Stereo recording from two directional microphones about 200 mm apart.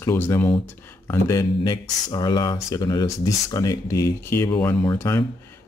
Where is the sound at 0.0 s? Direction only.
10° left (ahead or behind).